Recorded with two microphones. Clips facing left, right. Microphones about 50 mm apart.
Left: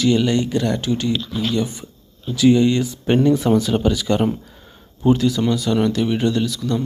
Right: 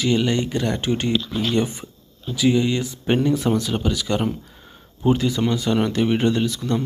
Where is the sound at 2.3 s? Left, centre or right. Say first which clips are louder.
Left 5 dB; centre.